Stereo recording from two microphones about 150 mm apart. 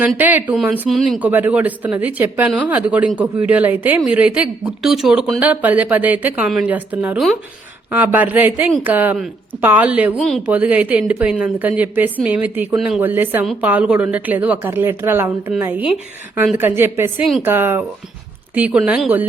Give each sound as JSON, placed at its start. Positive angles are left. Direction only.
{"t": 0.2, "sound": "speech", "side_deg": -10}
{"t": 1.2, "sound": "a woman's voice", "side_deg": -10}
{"t": 10.2, "sound": "speech", "side_deg": 5}
{"t": 10.4, "sound": "a woman's voice", "side_deg": -10}
{"t": 13.0, "sound": "a woman's voice", "side_deg": -10}